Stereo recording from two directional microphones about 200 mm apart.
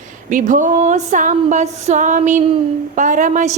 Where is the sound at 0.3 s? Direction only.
40° right (ahead or behind).